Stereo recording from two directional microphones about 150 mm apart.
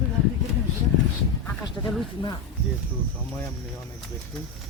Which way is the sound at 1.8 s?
25° left (ahead or behind).